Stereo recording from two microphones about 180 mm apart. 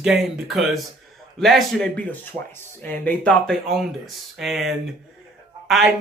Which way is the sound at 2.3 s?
15° right (ahead or behind).